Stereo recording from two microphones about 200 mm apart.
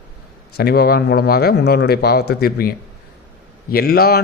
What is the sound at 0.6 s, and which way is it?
A man's voice, 50° left (ahead or behind).